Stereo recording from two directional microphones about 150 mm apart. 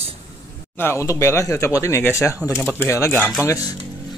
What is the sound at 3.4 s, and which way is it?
Music, 20° left (ahead or behind).